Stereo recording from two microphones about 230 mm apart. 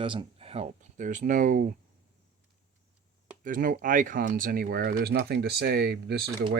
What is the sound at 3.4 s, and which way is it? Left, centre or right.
Speech, right.